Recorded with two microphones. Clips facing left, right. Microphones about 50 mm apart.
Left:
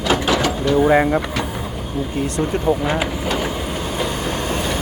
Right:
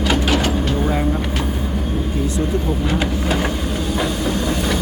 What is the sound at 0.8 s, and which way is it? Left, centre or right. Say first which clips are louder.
Speech: left 6 dB; left.